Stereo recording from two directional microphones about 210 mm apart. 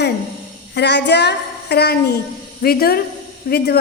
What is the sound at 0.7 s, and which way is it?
A woman's voice, 55° left (ahead or behind).